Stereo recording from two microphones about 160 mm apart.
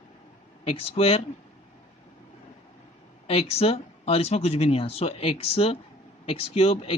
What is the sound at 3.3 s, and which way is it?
Speech, 40° left (ahead or behind).